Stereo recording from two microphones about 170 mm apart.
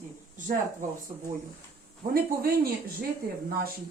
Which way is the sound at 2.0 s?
50° right (ahead or behind).